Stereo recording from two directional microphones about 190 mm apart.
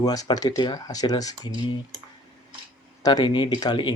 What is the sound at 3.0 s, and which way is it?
Speech, 20° left (ahead or behind).